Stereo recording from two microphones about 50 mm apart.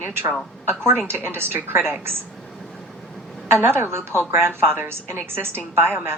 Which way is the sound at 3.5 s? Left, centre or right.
Right.